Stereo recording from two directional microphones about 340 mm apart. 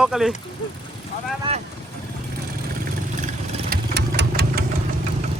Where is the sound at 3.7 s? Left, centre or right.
Right.